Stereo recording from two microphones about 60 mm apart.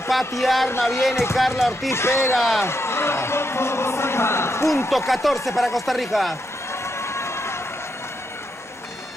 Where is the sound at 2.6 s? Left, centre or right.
Left.